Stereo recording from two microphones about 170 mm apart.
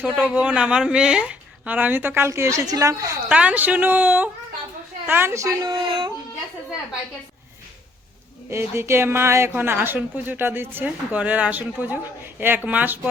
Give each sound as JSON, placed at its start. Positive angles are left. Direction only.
{"t": 0.0, "sound": "a woman's voice", "side_deg": -10}
{"t": 3.2, "sound": "a woman's voice", "side_deg": -5}
{"t": 5.6, "sound": "speech", "side_deg": -30}
{"t": 8.4, "sound": "a woman's voice", "side_deg": -15}